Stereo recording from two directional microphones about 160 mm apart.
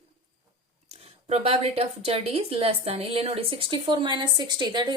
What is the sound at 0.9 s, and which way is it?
A woman's voice, 40° right (ahead or behind).